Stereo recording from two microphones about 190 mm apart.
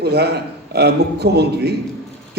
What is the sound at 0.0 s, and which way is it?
A man's voice, 60° right (ahead or behind).